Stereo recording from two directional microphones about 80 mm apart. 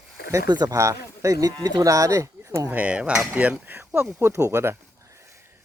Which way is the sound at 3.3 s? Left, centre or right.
Centre.